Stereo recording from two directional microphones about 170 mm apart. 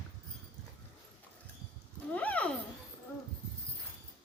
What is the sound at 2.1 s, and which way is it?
Speech, 10° left (ahead or behind).